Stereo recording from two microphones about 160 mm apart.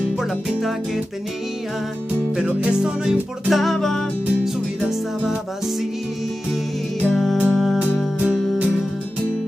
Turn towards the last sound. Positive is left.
turn(degrees=5)  # may be behind; listen again after turning